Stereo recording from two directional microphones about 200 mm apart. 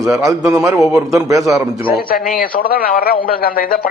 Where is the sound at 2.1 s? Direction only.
45° left (ahead or behind).